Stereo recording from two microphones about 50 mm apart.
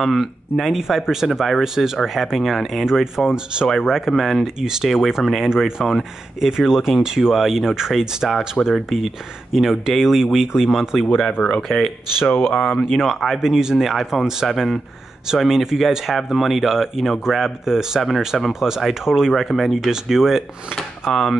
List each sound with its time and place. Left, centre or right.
0.0 s speech: centre
4.6 s speech: centre
11.4 s speech: centre
12.2 s speech: left
12.8 s speech: centre
13.4 s speech: centre
21.1 s speech: centre